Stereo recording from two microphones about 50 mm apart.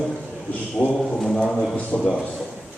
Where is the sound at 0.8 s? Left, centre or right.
Centre.